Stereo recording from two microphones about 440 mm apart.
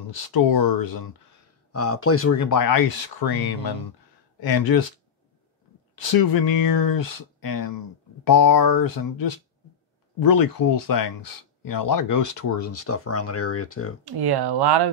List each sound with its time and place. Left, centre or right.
0.3 s speech: left
1.7 s speech: left
5.9 s speech: left
14.0 s speech: right